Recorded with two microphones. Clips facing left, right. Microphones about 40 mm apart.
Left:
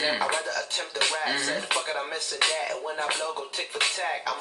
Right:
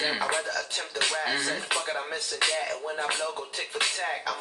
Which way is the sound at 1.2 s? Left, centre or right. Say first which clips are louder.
Left 1 dB; centre.